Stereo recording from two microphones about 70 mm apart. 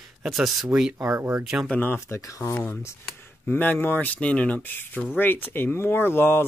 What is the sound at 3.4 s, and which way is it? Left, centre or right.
Speech, left.